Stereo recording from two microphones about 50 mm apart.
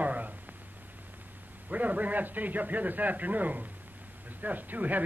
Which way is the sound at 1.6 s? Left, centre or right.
Right.